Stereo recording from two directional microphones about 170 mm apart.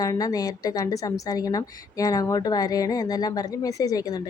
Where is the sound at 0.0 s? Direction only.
20° left (ahead or behind).